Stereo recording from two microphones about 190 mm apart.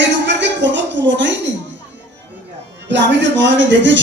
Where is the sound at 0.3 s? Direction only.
70° right (ahead or behind).